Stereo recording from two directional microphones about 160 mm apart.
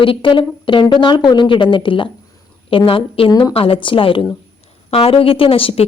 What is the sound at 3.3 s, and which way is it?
Speech, 25° left (ahead or behind).